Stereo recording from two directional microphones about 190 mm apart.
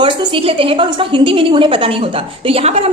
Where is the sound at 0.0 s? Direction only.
30° right (ahead or behind).